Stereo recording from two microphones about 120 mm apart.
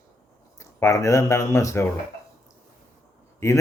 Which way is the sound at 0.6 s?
25° left (ahead or behind).